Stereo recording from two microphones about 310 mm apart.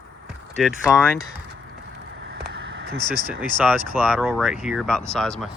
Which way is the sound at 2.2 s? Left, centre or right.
Right.